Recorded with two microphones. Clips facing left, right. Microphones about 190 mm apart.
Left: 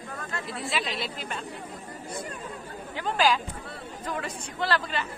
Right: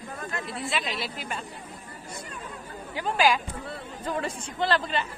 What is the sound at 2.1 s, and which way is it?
Chatter, 55° left (ahead or behind).